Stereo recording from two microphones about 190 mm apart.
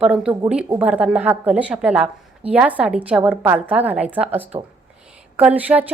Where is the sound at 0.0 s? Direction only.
5° right (ahead or behind).